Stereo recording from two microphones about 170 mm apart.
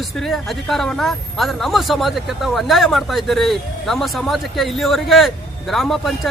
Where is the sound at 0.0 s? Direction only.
Centre (ahead or behind).